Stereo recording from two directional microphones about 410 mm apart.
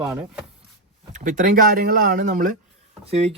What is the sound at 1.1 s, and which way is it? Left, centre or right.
Speech, centre.